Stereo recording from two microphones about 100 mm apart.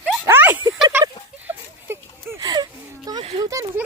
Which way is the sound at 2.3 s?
45° right (ahead or behind).